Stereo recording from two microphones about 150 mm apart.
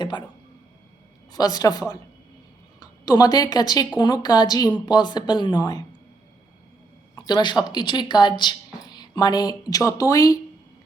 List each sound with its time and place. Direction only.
0.0 s speech: 30° left (ahead or behind)
1.3 s a woman's voice: 25° left (ahead or behind)
7.3 s a woman's voice: 30° left (ahead or behind)